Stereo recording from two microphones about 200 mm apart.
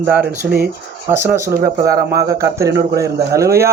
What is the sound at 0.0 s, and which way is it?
A man's voice, 10° right (ahead or behind).